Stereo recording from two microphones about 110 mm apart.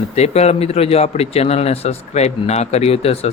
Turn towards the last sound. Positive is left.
turn(degrees=65)  # may be behind; listen again after turning